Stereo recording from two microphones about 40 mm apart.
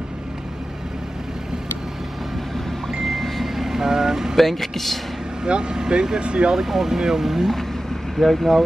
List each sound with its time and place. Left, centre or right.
3.0 s vehicle: centre
4.4 s speech: centre
5.4 s speech: right
6.5 s speech: centre
8.2 s speech: centre